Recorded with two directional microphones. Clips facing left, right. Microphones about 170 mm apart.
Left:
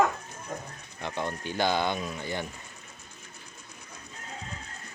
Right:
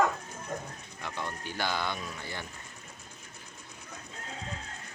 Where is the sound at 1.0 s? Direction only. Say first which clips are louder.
Left 5 dB; 20° left (ahead or behind).